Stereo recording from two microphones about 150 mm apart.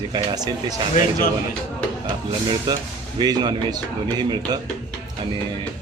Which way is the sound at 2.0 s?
30° right (ahead or behind).